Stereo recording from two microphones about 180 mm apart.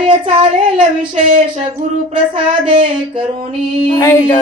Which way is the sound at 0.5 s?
40° right (ahead or behind).